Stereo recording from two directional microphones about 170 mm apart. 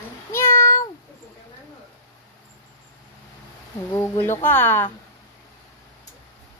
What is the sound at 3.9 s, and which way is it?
Speech, 15° left (ahead or behind).